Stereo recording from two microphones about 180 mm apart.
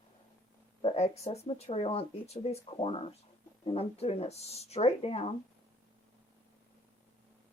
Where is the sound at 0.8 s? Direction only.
30° left (ahead or behind).